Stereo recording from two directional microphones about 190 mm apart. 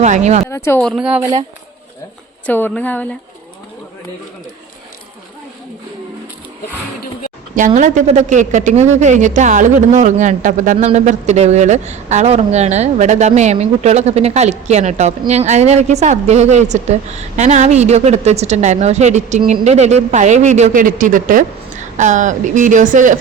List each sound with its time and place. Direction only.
0.0 s a woman's voice: 35° right (ahead or behind)
0.5 s speech: 15° left (ahead or behind); by 1.2 s 5° right (ahead or behind)
2.5 s a woman's voice: 10° left (ahead or behind)
7.8 s a woman's voice: 40° right (ahead or behind)